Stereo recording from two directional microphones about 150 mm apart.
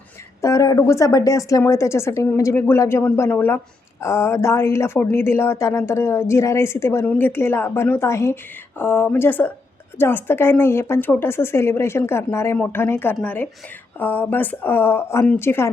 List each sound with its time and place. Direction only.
0.4 s a woman's voice: 20° left (ahead or behind)